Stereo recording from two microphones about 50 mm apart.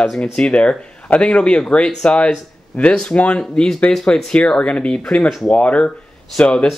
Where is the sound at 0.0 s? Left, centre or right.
Centre.